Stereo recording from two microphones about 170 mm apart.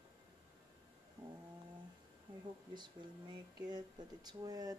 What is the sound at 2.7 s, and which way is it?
Speech, 25° right (ahead or behind).